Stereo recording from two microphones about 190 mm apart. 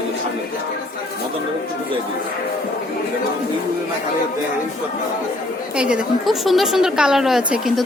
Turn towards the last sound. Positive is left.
turn(degrees=0)  # may be behind; listen again after turning